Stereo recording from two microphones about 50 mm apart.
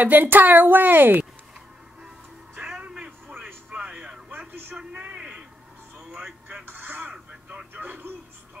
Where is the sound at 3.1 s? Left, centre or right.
Right.